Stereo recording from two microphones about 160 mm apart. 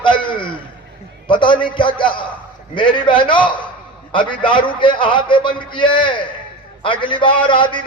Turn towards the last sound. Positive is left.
turn(degrees=30)  # may be behind; listen again after turning